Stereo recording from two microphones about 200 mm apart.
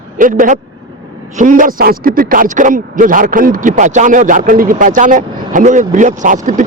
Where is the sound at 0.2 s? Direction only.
40° right (ahead or behind).